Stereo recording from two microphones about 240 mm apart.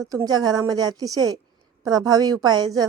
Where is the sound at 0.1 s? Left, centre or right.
Centre.